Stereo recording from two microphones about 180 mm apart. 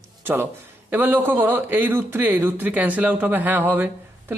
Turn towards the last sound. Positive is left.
turn(degrees=-10)  # may be behind; listen again after turning